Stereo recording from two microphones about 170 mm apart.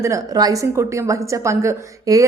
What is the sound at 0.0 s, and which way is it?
A woman's voice, 20° right (ahead or behind).